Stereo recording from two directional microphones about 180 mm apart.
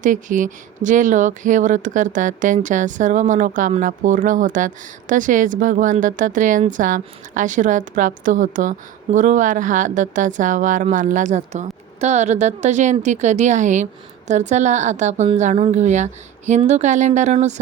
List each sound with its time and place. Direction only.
0.0 s a woman's voice: 45° right (ahead or behind)